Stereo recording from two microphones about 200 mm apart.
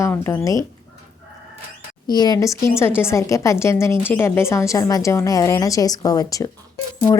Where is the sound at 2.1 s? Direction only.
20° left (ahead or behind).